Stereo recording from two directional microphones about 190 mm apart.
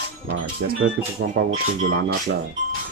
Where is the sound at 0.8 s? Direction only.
90° right.